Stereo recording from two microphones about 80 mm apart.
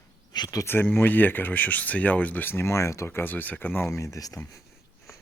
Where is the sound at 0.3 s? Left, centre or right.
Left.